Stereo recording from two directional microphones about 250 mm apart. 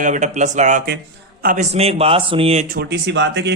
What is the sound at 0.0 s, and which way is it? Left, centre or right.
Speech, right.